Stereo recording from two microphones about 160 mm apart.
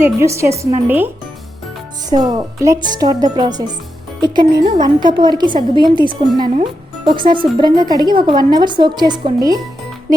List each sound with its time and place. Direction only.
0.2 s speech: 15° right (ahead or behind)
2.0 s speech: 25° right (ahead or behind)